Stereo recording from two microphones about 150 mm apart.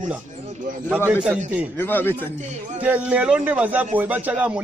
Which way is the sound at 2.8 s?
10° right (ahead or behind).